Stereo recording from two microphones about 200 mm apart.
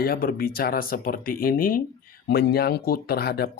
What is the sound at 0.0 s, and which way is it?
Speech, 50° left (ahead or behind).